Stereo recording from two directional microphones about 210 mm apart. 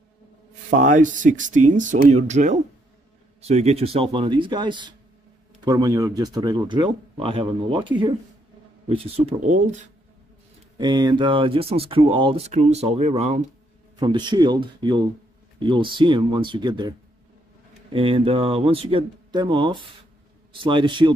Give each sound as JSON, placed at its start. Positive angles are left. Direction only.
{"t": 0.7, "sound": "speech", "side_deg": -35}
{"t": 10.8, "sound": "speech", "side_deg": -20}
{"t": 13.9, "sound": "speech", "side_deg": -20}
{"t": 17.9, "sound": "speech", "side_deg": -25}